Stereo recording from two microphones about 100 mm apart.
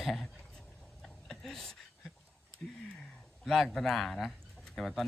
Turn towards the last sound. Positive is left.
turn(degrees=5)  # may be behind; listen again after turning